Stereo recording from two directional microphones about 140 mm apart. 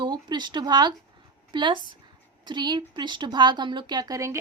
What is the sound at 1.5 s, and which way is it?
A woman's voice, 35° right (ahead or behind).